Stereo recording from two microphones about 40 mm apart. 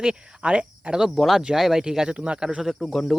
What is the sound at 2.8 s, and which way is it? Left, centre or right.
Speech, centre.